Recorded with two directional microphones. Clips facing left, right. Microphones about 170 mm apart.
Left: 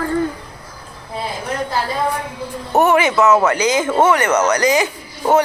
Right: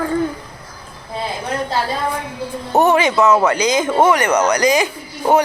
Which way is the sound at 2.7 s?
20° right (ahead or behind).